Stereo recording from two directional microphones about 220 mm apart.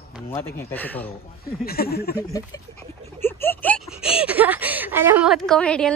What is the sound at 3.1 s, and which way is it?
Speech, 10° left (ahead or behind).